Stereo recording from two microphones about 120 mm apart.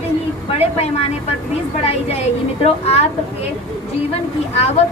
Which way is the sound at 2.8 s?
65° left (ahead or behind).